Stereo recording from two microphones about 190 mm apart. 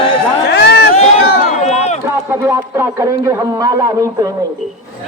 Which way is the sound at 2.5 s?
15° right (ahead or behind).